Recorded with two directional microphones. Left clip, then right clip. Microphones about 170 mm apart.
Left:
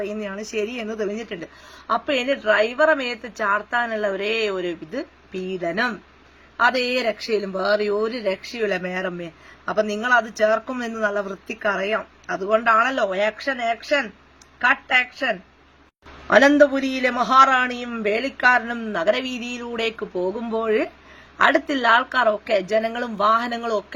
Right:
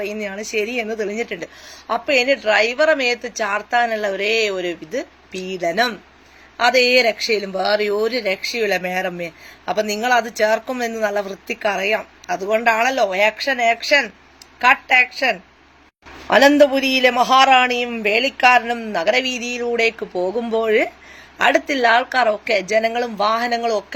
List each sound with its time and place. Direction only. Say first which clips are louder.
0.0 s speech: right 3 dB; 10° left (ahead or behind)